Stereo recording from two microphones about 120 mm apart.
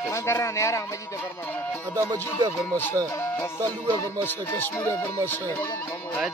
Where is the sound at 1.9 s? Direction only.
30° right (ahead or behind).